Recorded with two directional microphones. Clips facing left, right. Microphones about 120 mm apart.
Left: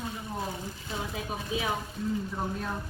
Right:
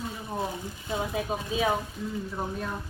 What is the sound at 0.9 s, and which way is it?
Speech, 25° right (ahead or behind).